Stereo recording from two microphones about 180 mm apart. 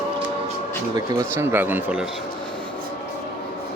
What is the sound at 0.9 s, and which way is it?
Speech, 15° right (ahead or behind).